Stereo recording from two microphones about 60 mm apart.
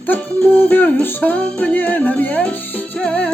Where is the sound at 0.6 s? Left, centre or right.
Left; by 3.3 s centre.